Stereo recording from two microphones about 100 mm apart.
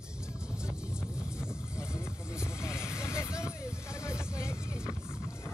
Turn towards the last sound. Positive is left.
turn(degrees=30)  # may be behind; listen again after turning